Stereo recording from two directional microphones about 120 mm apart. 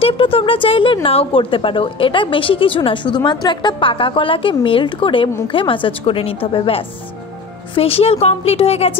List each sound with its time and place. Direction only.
0.0 s a woman's voice: 50° left (ahead or behind)